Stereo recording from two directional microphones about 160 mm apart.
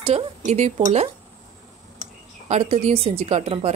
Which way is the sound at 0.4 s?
45° right (ahead or behind).